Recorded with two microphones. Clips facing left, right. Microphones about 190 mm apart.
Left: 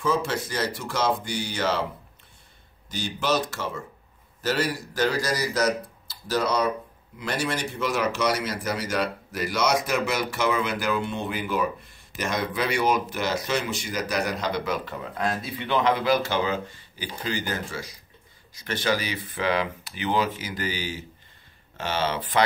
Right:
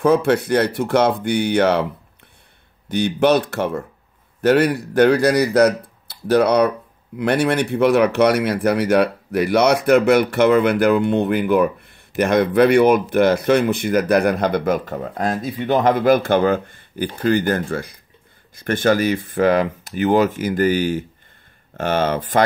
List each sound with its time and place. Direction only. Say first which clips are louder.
0.0 s speech: right 10 dB; 60° right (ahead or behind)
2.9 s speech: right 10 dB; 60° right (ahead or behind)